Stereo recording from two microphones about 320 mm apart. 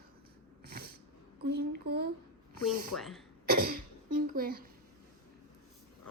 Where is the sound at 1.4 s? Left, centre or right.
Right.